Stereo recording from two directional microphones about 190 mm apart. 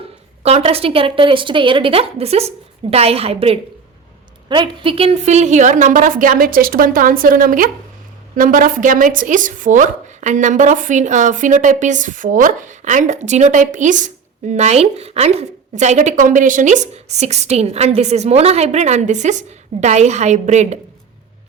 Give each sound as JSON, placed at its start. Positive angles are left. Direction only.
{"t": 0.4, "sound": "a woman's voice", "side_deg": -30}